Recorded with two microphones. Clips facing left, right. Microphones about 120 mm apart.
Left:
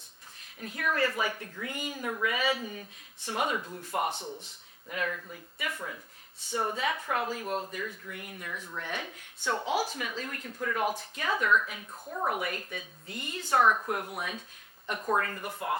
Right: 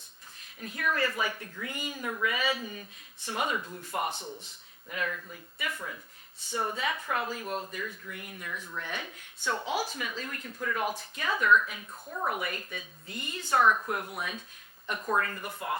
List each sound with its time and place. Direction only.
0.6 s speech: 45° left (ahead or behind)
3.6 s speech: 35° left (ahead or behind)
4.1 s speech: 20° left (ahead or behind)
4.9 s speech: 40° left (ahead or behind)
6.5 s speech: 30° left (ahead or behind)
6.7 s speech: 45° left (ahead or behind); by 12.3 s 30° left (ahead or behind)
12.3 s speech: 50° left (ahead or behind)
14.8 s speech: 35° left (ahead or behind)